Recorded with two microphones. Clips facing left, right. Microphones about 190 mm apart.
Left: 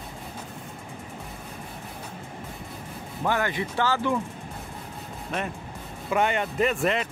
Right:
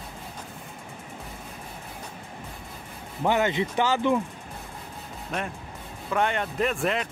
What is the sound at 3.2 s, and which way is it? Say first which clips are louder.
Speech: right 3 dB; 20° right (ahead or behind).